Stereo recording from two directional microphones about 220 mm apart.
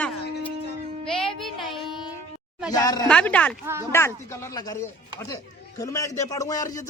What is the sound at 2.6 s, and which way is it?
Speech, 15° left (ahead or behind).